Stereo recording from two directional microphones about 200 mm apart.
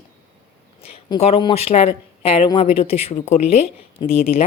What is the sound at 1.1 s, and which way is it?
Speech, 30° left (ahead or behind).